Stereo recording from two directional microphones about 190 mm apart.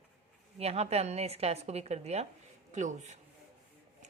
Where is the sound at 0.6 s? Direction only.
35° right (ahead or behind).